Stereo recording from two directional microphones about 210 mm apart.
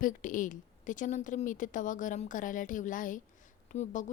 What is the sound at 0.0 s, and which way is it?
A woman's voice, 40° left (ahead or behind).